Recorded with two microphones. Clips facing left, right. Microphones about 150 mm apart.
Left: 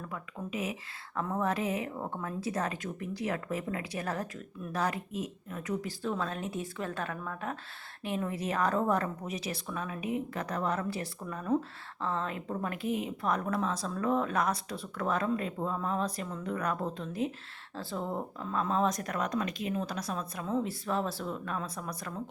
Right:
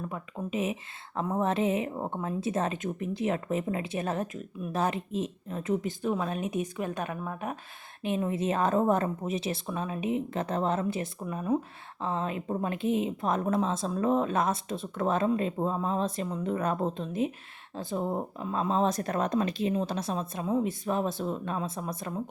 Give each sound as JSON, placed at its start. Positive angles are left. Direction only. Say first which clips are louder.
{"t": 0.1, "sound": "speech", "louder": "right 4 dB", "side_deg": -25}